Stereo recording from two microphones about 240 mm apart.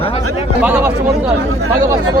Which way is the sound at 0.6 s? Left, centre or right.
Centre.